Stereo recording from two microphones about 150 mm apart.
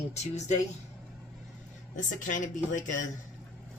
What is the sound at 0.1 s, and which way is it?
Speech, 50° left (ahead or behind).